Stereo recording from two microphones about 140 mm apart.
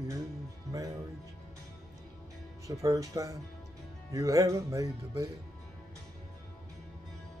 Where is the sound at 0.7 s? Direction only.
25° right (ahead or behind).